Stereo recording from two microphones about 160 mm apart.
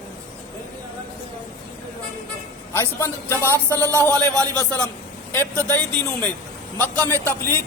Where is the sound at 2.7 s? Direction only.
15° left (ahead or behind).